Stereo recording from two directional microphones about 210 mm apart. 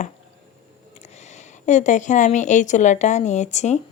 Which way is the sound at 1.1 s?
35° left (ahead or behind).